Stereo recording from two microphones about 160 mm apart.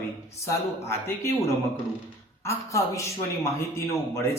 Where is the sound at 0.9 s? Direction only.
15° left (ahead or behind).